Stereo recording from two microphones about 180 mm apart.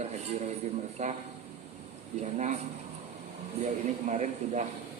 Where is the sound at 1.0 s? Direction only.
40° right (ahead or behind).